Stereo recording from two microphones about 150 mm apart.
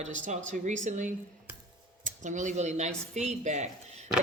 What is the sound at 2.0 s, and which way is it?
Speech, 55° right (ahead or behind).